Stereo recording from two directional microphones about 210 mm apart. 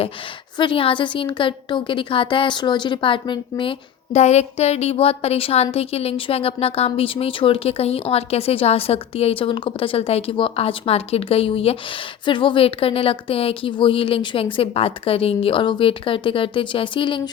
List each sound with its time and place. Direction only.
0.5 s speech: 25° left (ahead or behind)